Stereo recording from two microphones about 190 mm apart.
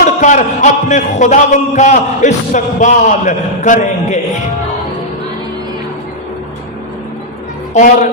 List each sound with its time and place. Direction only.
0.0 s a man's voice: 40° left (ahead or behind)
7.7 s a man's voice: 40° left (ahead or behind)